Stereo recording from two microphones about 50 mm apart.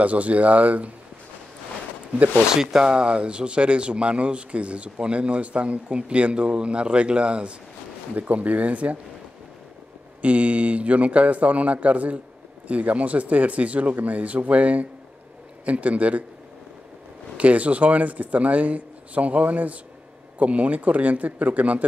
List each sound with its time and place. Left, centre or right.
0.0 s speech: right
2.5 s speech: centre; by 8.9 s right
10.2 s speech: right
17.4 s speech: right